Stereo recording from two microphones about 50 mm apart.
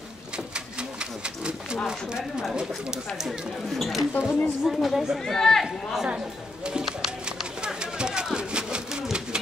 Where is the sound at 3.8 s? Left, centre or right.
Centre.